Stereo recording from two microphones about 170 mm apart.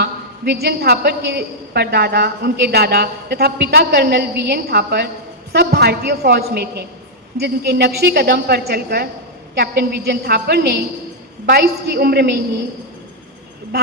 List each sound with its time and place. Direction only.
0.0 s a woman's voice: 75° right (ahead or behind)